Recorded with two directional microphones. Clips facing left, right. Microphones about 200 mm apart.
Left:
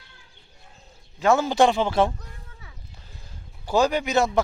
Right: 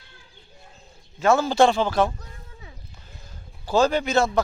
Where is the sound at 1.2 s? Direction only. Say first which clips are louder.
Right 1 dB; 15° left (ahead or behind).